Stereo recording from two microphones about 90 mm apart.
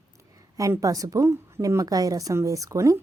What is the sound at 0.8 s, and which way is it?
A woman's voice, 40° right (ahead or behind).